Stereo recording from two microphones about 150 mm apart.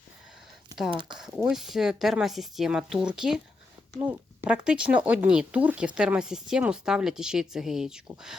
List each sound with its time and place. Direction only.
0.9 s speech: 30° right (ahead or behind)
1.5 s speech: centre (ahead or behind)
4.4 s speech: 5° right (ahead or behind)